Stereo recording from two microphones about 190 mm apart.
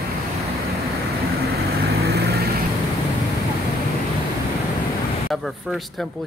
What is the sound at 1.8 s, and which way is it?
Vehicle, 60° right (ahead or behind).